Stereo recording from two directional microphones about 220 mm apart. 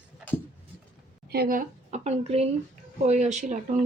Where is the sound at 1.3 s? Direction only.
45° right (ahead or behind).